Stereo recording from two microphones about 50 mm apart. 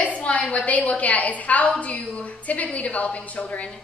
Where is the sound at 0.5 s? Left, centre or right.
Left.